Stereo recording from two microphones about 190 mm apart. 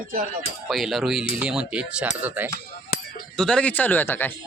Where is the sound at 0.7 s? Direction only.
Centre (ahead or behind).